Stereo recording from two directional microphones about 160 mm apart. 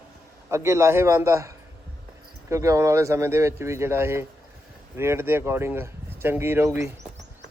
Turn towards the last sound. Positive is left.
turn(degrees=-15)  # may be behind; listen again after turning